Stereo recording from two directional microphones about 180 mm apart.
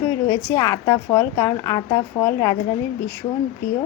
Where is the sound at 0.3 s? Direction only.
15° left (ahead or behind).